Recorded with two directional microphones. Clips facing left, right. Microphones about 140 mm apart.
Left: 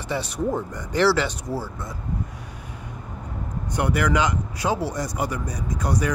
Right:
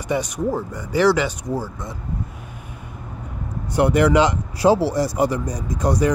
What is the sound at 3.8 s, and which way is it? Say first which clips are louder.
Speech: right 7 dB; 25° right (ahead or behind).